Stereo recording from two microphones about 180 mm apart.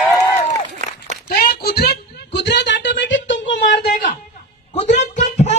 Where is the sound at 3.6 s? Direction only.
50° left (ahead or behind).